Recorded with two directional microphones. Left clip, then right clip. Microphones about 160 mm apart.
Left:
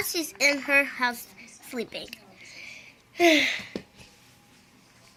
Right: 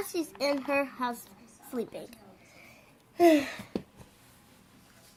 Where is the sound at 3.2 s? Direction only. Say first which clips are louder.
Left 3 dB; 5° right (ahead or behind).